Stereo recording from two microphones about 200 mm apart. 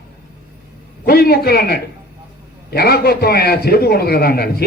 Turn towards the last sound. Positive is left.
turn(degrees=50)  # may be behind; listen again after turning